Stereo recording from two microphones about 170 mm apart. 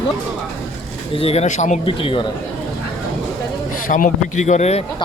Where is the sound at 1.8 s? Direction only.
30° left (ahead or behind).